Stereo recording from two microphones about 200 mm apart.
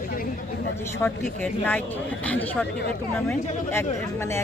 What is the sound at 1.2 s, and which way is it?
Speech, 5° left (ahead or behind).